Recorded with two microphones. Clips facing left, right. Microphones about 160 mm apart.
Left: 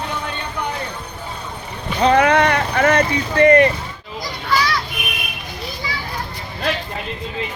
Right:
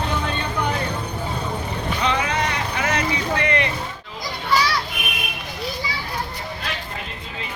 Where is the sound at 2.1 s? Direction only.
60° left (ahead or behind); by 3.7 s 45° left (ahead or behind).